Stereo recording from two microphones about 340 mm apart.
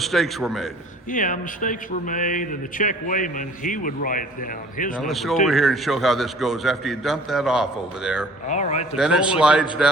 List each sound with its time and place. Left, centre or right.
0.0 s a man's voice: centre
1.1 s a man's voice: left
4.9 s a man's voice: centre
8.4 s a man's voice: centre
9.0 s a man's voice: centre